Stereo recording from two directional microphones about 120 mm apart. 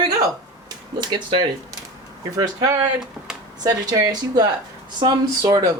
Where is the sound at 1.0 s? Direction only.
35° right (ahead or behind).